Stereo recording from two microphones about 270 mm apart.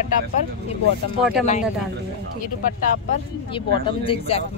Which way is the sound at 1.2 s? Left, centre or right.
Centre.